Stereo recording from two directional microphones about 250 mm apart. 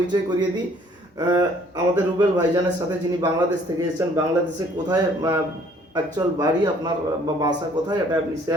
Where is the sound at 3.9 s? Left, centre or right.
Centre.